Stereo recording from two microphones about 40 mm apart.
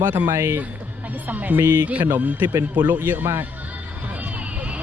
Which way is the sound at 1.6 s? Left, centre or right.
Right.